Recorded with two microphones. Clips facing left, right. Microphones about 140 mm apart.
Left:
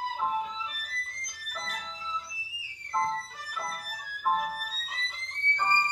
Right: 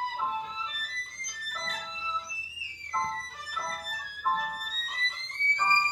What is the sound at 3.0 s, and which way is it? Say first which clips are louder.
Music: left 3 dB; centre (ahead or behind).